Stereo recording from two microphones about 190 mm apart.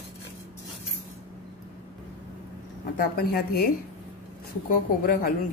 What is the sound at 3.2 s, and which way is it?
Speech, 55° left (ahead or behind).